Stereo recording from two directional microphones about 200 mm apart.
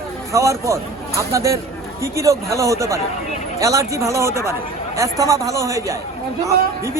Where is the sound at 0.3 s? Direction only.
15° right (ahead or behind).